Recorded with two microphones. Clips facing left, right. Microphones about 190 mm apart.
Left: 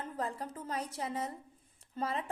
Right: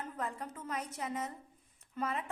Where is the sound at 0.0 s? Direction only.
30° left (ahead or behind).